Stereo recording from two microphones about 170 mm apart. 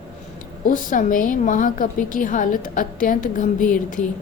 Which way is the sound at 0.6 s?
50° left (ahead or behind).